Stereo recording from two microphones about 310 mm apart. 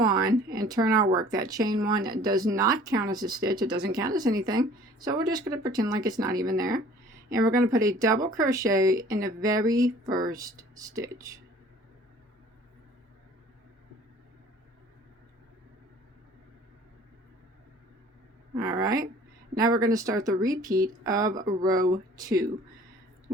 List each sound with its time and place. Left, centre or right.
0.0 s a sound: centre
0.6 s speech: centre
6.3 s speech: right
6.6 s speech: centre
18.5 s speech: centre
21.8 s speech: centre